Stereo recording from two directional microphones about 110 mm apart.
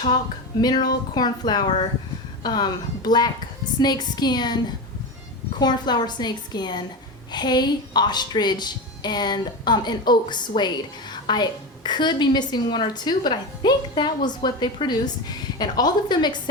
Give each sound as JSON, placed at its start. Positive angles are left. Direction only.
{"t": 0.6, "sound": "a woman's voice", "side_deg": 40}